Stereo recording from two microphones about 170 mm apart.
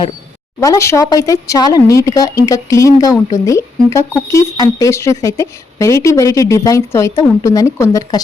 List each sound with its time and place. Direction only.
0.6 s a woman's voice: 20° left (ahead or behind)